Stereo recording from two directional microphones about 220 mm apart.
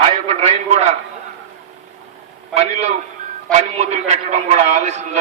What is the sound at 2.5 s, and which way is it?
A man's voice, 30° right (ahead or behind).